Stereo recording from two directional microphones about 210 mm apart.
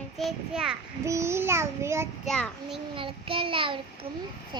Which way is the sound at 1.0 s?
15° right (ahead or behind).